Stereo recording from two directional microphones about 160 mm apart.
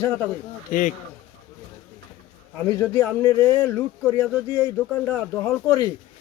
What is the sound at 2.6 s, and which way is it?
A man's voice, 20° left (ahead or behind).